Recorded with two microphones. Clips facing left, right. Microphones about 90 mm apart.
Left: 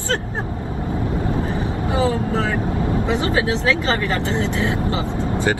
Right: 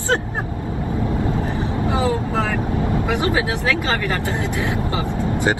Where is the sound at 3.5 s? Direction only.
25° left (ahead or behind).